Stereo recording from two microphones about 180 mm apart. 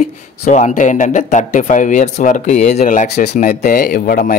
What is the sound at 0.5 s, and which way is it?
Speech, 40° left (ahead or behind).